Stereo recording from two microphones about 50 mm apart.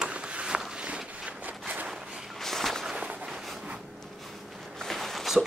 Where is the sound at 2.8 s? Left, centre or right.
Centre.